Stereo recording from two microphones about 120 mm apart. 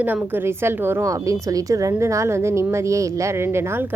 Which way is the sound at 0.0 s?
15° right (ahead or behind).